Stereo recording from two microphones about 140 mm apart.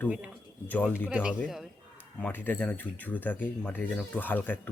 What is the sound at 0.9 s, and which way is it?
Speech, 5° right (ahead or behind).